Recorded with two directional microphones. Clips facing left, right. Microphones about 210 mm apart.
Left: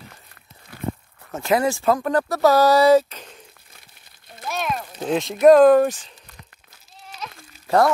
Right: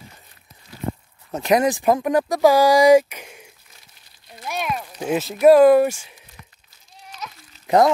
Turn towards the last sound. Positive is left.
turn(degrees=-20)  # may be behind; listen again after turning